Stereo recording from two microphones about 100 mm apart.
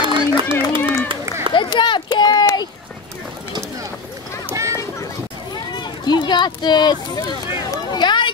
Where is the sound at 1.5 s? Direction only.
50° left (ahead or behind).